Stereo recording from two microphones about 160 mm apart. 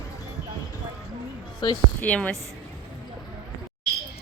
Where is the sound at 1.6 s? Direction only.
30° left (ahead or behind).